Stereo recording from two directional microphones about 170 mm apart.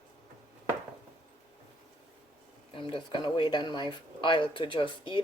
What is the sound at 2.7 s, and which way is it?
Speech, 30° left (ahead or behind).